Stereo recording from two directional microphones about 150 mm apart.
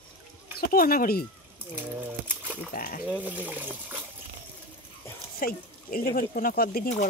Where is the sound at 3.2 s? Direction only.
10° right (ahead or behind).